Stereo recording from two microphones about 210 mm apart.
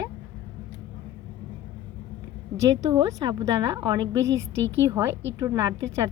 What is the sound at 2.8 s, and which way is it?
A woman's voice, 20° right (ahead or behind).